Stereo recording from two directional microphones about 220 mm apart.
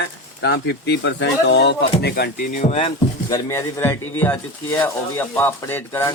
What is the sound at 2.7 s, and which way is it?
Speech, 25° left (ahead or behind).